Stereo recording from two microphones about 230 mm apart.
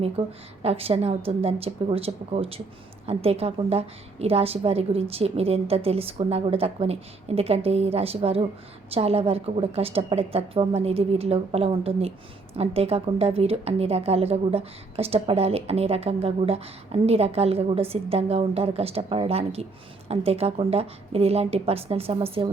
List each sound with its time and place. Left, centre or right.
0.2 s a woman's voice: right